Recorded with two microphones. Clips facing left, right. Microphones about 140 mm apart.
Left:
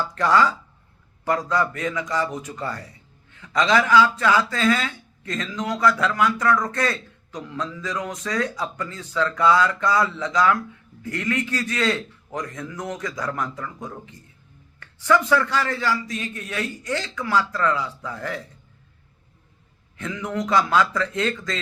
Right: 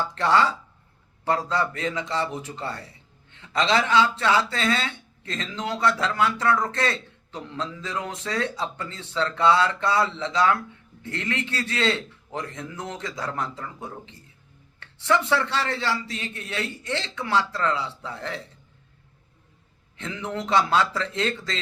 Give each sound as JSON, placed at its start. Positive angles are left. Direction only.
{"t": 0.0, "sound": "speech", "side_deg": -25}
{"t": 20.0, "sound": "speech", "side_deg": -25}